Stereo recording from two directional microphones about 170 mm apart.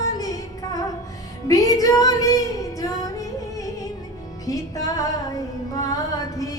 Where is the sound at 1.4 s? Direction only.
20° left (ahead or behind).